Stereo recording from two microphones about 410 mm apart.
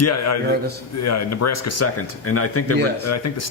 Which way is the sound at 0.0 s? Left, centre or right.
Left.